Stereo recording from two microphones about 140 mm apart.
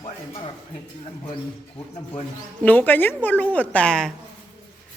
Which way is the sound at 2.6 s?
10° left (ahead or behind).